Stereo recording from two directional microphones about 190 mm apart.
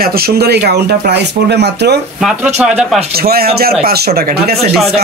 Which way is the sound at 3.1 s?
55° right (ahead or behind).